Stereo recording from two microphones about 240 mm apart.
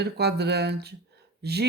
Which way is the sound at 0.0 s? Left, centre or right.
Right.